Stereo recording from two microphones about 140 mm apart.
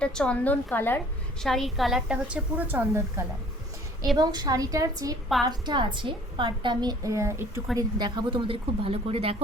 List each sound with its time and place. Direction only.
0.0 s a woman's voice: 5° left (ahead or behind)
1.4 s a woman's voice: centre (ahead or behind); by 3.2 s 15° right (ahead or behind)
4.2 s a woman's voice: 30° right (ahead or behind)
7.8 s a woman's voice: 30° right (ahead or behind)